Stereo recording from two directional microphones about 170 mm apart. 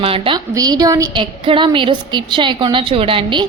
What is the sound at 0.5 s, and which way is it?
A woman's voice, 20° right (ahead or behind).